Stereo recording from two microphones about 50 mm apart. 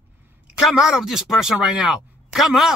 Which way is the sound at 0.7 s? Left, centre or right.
Centre.